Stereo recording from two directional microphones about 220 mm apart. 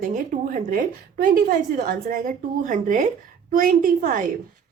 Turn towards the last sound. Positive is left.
turn(degrees=-35)  # may be behind; listen again after turning